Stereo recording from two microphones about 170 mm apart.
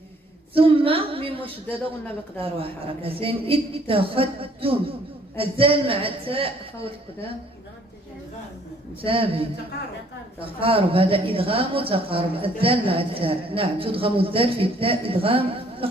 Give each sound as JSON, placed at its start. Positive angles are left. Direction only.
{"t": 0.6, "sound": "speech", "side_deg": -35}
{"t": 1.7, "sound": "speech", "side_deg": 10}
{"t": 2.4, "sound": "speech", "side_deg": -35}
{"t": 9.0, "sound": "speech", "side_deg": -30}